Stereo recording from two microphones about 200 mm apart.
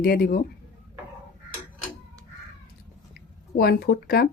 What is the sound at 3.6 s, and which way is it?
Speech, 50° left (ahead or behind).